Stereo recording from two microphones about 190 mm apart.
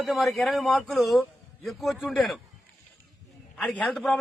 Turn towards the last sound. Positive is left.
turn(degrees=0)  # may be behind; listen again after turning